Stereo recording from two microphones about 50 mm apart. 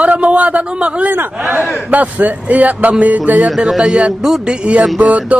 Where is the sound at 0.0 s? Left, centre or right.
Right.